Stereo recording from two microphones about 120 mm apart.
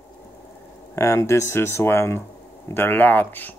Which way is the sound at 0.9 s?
25° left (ahead or behind).